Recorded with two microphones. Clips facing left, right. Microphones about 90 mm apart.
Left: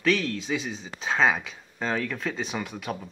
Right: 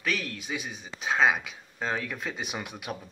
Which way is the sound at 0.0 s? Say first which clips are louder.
Left 7 dB; 15° right (ahead or behind).